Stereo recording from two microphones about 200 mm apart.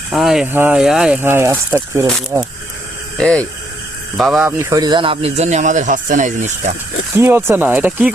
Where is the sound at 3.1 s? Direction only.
5° left (ahead or behind); by 6.7 s 35° right (ahead or behind).